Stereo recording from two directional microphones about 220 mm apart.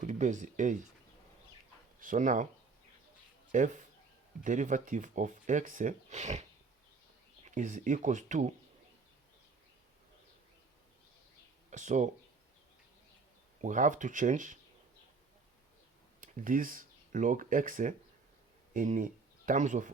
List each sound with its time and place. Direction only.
0.0 s speech: 35° right (ahead or behind)
2.0 s speech: 35° right (ahead or behind)
3.5 s speech: 35° right (ahead or behind)
7.4 s speech: 35° right (ahead or behind)
11.7 s speech: 35° right (ahead or behind)
13.6 s speech: 35° right (ahead or behind)
16.2 s speech: 35° right (ahead or behind)